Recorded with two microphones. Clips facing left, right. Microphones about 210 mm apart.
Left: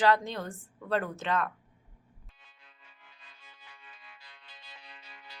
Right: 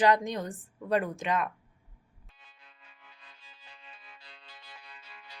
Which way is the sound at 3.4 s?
30° right (ahead or behind).